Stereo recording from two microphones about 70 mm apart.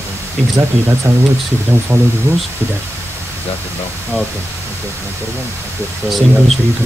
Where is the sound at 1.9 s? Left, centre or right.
Right.